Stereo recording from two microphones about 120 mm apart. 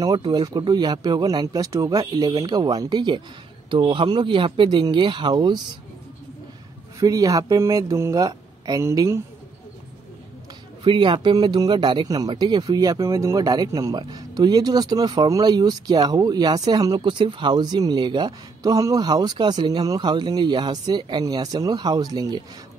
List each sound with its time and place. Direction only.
0.0 s speech: 35° right (ahead or behind)
7.0 s speech: 30° right (ahead or behind)
10.8 s speech: 45° right (ahead or behind)